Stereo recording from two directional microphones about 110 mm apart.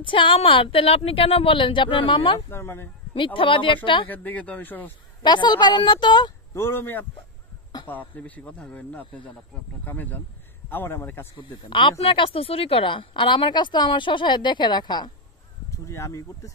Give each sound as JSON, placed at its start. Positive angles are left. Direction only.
{"t": 0.0, "sound": "a woman's voice", "side_deg": 50}
{"t": 2.5, "sound": "speech", "side_deg": 20}
{"t": 3.3, "sound": "a woman's voice", "side_deg": 50}
{"t": 4.1, "sound": "speech", "side_deg": 15}
{"t": 5.2, "sound": "a woman's voice", "side_deg": 40}
{"t": 6.5, "sound": "speech", "side_deg": 25}
{"t": 11.3, "sound": "a woman's voice", "side_deg": 50}
{"t": 15.9, "sound": "speech", "side_deg": 30}